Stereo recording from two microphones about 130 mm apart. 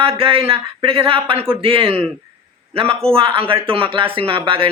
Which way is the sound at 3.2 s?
45° right (ahead or behind).